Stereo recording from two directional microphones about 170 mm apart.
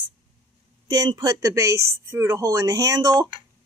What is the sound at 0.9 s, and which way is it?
Speech, 25° right (ahead or behind).